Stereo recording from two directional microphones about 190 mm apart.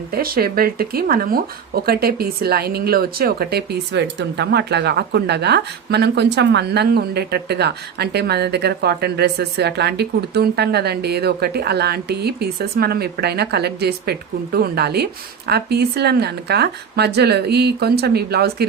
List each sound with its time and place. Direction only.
0.1 s speech: 50° right (ahead or behind)